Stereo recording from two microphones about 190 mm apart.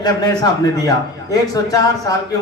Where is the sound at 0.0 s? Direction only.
20° left (ahead or behind).